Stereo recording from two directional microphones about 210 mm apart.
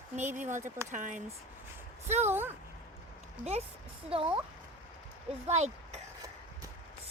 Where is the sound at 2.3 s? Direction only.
10° right (ahead or behind).